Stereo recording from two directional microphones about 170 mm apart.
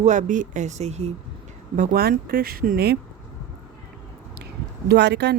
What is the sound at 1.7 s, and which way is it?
Speech, 55° right (ahead or behind).